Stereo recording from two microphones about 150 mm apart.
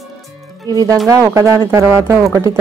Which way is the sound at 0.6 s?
25° right (ahead or behind).